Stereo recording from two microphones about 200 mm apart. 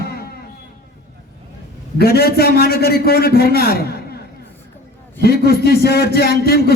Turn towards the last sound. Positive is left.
turn(degrees=50)  # may be behind; listen again after turning